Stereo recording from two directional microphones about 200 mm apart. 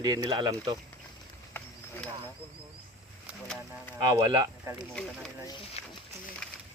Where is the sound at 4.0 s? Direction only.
20° right (ahead or behind).